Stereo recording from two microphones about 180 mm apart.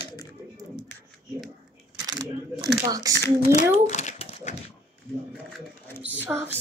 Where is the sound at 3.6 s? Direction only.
40° left (ahead or behind).